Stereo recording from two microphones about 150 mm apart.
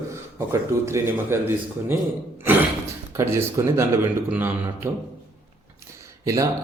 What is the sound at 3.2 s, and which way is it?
Speech, 15° right (ahead or behind).